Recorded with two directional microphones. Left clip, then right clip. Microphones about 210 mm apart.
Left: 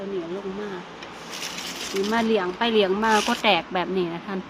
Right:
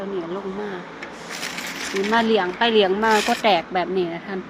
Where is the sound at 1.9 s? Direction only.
5° left (ahead or behind).